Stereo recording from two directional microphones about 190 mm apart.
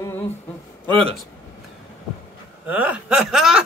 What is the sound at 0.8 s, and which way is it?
Speech, 25° right (ahead or behind).